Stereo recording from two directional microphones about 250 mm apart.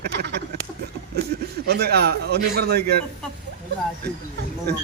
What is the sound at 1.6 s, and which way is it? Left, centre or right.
A man's voice, right.